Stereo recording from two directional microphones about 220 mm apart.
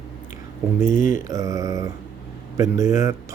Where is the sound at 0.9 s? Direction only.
35° left (ahead or behind).